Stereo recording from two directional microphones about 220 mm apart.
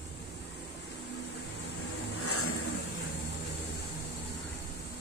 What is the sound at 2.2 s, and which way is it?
Vehicle, 85° left.